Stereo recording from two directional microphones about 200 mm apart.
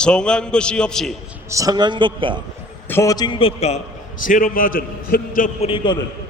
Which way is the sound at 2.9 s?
15° left (ahead or behind).